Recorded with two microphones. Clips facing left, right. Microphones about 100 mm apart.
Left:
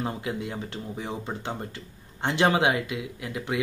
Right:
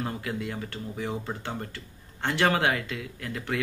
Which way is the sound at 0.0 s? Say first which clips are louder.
Left 1 dB; 20° left (ahead or behind).